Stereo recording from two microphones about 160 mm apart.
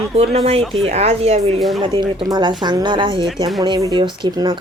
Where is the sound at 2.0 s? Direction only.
30° right (ahead or behind).